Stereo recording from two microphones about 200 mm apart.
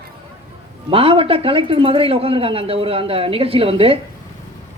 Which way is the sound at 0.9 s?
25° right (ahead or behind).